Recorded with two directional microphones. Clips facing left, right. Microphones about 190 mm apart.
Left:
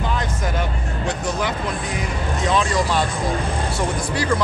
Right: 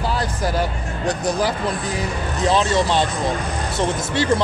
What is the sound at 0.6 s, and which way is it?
Speech, 35° right (ahead or behind).